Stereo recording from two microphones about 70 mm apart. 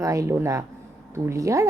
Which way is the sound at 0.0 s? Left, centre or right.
Right.